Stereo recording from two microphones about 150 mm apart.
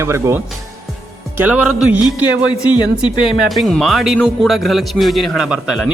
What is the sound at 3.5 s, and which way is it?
A man's voice, centre (ahead or behind).